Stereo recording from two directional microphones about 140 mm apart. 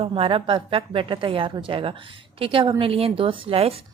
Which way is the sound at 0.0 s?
40° right (ahead or behind).